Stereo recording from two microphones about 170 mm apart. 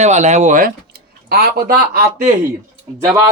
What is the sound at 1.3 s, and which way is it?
Speech, 65° right (ahead or behind).